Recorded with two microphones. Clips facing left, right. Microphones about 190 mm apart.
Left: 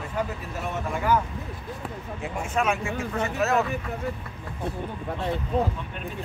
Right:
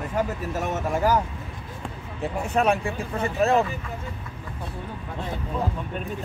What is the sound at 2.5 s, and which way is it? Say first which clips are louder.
Speech: right 3 dB; 35° right (ahead or behind).